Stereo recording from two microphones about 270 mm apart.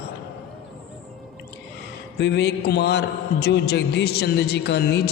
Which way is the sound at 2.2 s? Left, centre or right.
Left.